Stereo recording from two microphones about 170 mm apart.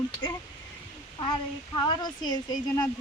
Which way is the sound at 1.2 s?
25° left (ahead or behind).